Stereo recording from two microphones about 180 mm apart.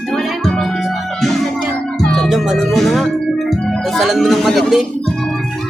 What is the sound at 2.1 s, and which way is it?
Music, centre (ahead or behind).